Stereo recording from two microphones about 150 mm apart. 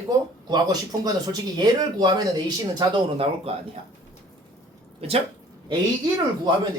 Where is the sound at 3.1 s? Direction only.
40° right (ahead or behind).